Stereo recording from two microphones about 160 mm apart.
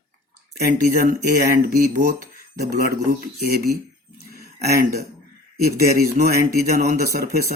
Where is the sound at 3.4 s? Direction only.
75° right (ahead or behind).